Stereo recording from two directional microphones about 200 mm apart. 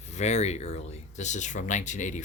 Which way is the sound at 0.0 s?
35° left (ahead or behind).